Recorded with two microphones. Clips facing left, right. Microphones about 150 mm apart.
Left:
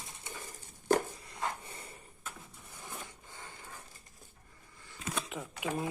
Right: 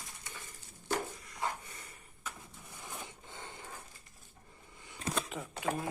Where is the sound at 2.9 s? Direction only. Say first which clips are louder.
Even; 25° right (ahead or behind).